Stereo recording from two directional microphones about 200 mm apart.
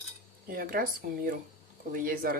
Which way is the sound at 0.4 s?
45° right (ahead or behind).